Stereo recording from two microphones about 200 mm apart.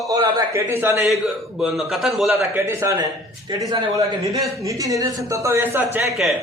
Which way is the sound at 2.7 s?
15° right (ahead or behind).